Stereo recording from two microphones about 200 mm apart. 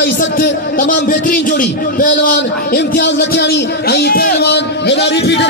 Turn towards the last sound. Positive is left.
turn(degrees=60)  # may be behind; listen again after turning